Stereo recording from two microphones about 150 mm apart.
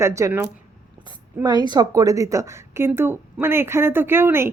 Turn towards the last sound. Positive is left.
turn(degrees=-15)  # may be behind; listen again after turning